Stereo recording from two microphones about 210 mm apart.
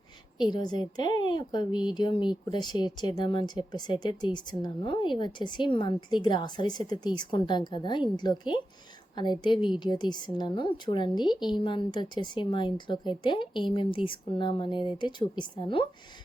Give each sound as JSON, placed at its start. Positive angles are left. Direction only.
{"t": 0.5, "sound": "speech", "side_deg": 20}